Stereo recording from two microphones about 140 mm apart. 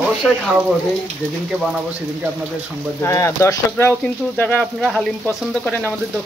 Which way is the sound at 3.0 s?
20° left (ahead or behind).